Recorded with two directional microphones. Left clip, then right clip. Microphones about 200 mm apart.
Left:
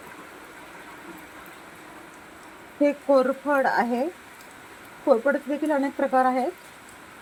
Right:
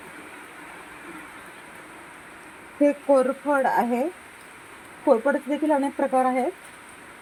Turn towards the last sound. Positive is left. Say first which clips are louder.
# even
turn(degrees=-15)  # may be behind; listen again after turning